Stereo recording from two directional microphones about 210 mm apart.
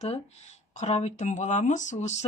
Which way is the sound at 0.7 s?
30° left (ahead or behind).